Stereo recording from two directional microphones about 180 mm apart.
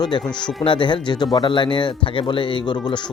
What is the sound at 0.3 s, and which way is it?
Speech, 25° left (ahead or behind).